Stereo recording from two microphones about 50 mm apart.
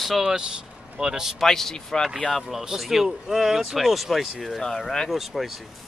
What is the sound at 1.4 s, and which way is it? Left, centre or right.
A man's voice, centre.